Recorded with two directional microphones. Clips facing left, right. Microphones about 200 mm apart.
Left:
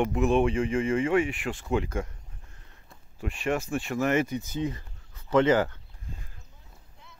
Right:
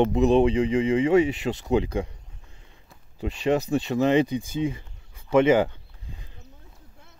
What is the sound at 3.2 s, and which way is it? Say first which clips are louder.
Speech: right 5 dB; 20° right (ahead or behind).